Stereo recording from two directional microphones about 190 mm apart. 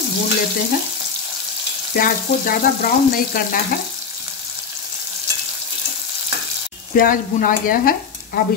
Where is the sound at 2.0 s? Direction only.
45° left (ahead or behind).